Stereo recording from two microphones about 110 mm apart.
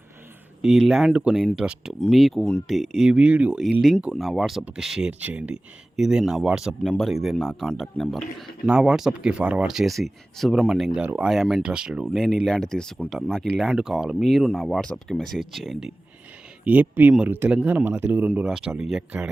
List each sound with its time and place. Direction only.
0.6 s speech: 5° right (ahead or behind)
3.1 s speech: 10° right (ahead or behind)
3.6 s speech: centre (ahead or behind)
16.6 s speech: 15° right (ahead or behind)